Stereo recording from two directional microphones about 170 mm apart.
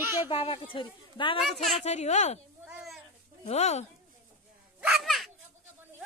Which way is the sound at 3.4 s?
40° left (ahead or behind).